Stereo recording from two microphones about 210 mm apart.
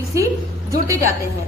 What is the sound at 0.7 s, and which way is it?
Speech, 15° right (ahead or behind).